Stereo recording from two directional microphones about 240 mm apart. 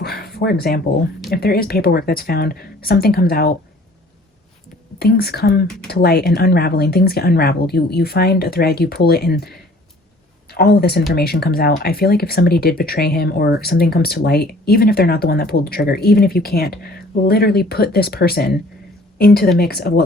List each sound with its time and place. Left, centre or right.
0.0 s a sound: left
1.3 s speech: left
4.9 s speech: left